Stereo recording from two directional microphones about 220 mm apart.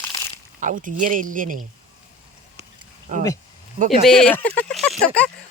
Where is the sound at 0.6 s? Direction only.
35° right (ahead or behind).